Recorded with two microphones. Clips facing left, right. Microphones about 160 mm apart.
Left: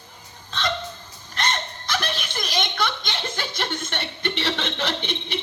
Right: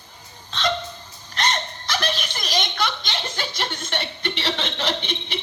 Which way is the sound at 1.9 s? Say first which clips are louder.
Right 1 dB; 50° left (ahead or behind).